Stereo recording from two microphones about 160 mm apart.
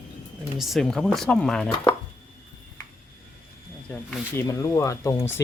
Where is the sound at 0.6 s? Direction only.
Centre (ahead or behind).